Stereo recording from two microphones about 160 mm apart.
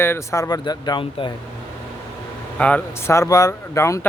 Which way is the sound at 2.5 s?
10° left (ahead or behind).